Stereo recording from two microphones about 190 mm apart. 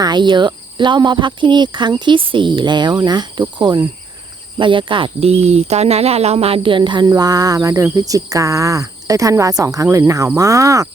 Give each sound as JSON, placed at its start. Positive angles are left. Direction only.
{"t": 0.0, "sound": "speech", "side_deg": -25}